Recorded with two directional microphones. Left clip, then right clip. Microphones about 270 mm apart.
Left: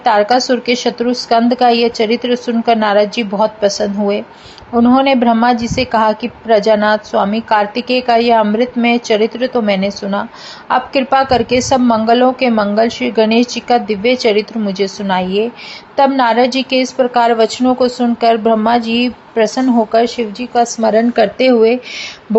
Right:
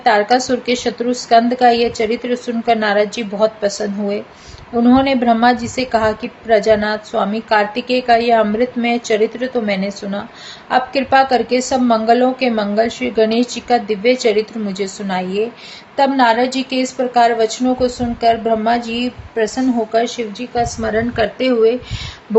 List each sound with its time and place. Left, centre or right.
0.0 s a woman's voice: centre